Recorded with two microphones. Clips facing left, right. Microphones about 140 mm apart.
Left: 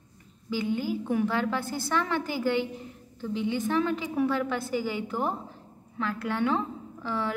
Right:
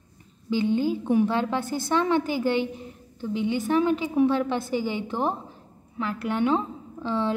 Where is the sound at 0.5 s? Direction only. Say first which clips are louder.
Right 5 dB; 25° right (ahead or behind).